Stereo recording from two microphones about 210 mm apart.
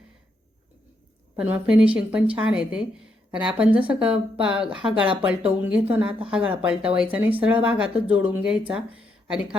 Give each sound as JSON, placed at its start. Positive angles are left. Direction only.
{"t": 1.4, "sound": "speech", "side_deg": -5}